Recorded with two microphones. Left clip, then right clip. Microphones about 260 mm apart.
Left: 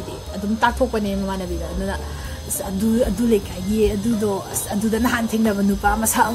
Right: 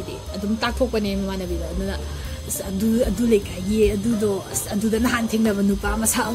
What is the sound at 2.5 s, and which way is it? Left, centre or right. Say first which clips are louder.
Speech: left 1 dB; centre.